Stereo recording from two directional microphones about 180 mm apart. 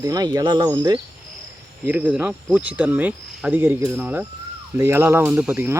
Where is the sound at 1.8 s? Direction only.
10° right (ahead or behind).